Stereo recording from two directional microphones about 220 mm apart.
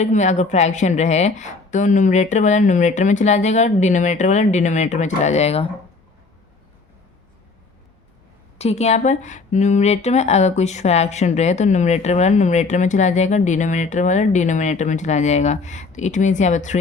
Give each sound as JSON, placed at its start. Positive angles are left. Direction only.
{"t": 0.0, "sound": "speech", "side_deg": 30}
{"t": 8.5, "sound": "speech", "side_deg": 30}